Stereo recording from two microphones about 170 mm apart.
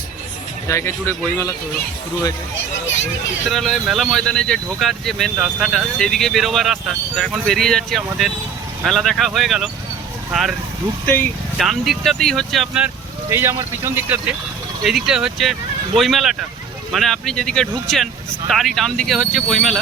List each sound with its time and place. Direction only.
0.7 s a man's voice: 15° left (ahead or behind)
3.5 s speech: centre (ahead or behind)
11.0 s a man's voice: 10° left (ahead or behind)
11.5 s speech: centre (ahead or behind)
13.3 s speech: 15° right (ahead or behind); by 19.8 s centre (ahead or behind)